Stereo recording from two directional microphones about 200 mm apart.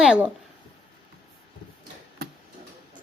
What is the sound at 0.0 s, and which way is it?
Speech, 5° right (ahead or behind).